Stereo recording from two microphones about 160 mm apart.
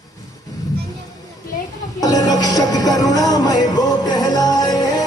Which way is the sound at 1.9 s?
25° left (ahead or behind).